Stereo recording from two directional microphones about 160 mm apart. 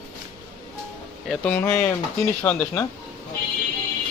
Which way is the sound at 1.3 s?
5° left (ahead or behind).